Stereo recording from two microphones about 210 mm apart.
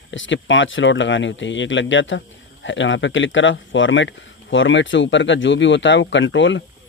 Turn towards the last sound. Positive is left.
turn(degrees=60)  # may be behind; listen again after turning